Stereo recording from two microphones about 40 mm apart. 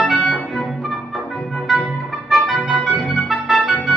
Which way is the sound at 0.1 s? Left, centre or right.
Centre.